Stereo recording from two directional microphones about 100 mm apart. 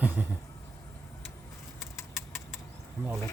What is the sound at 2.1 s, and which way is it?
Vehicle, 25° left (ahead or behind).